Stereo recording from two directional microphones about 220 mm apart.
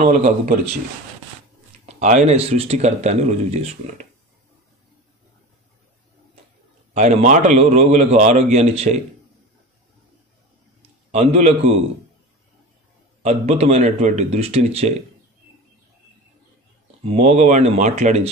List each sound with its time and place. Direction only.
0.0 s speech: 30° right (ahead or behind)
2.0 s speech: 30° right (ahead or behind)
6.9 s speech: 30° right (ahead or behind)
11.1 s a man's voice: 30° right (ahead or behind)
13.2 s a man's voice: 30° right (ahead or behind)
17.0 s speech: 30° right (ahead or behind)